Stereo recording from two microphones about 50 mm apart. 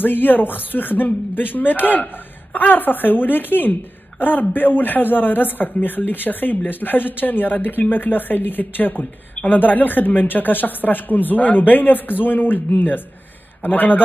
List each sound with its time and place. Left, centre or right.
0.0 s a woman's voice: left